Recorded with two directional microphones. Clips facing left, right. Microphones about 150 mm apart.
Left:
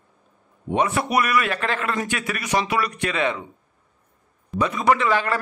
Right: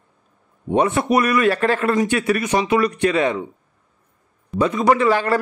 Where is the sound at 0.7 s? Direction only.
30° right (ahead or behind).